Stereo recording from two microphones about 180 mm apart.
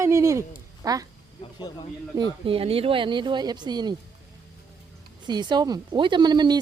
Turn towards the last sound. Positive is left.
turn(degrees=-25)  # may be behind; listen again after turning